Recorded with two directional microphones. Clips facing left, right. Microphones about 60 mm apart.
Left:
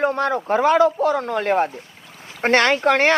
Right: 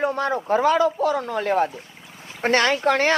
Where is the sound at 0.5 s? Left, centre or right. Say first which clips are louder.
Left 3 dB; left.